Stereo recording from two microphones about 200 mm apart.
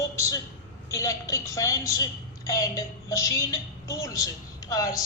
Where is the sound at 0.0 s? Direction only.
15° left (ahead or behind).